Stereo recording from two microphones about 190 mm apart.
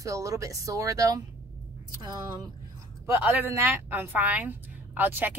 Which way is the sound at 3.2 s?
10° right (ahead or behind).